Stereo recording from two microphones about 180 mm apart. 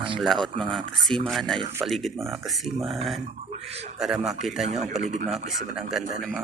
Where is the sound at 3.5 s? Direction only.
35° right (ahead or behind).